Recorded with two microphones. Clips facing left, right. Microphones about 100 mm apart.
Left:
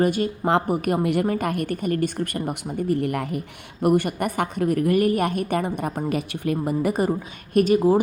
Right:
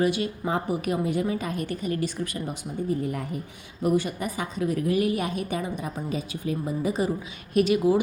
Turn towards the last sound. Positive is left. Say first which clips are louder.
# left 3 dB
turn(degrees=40)  # may be behind; listen again after turning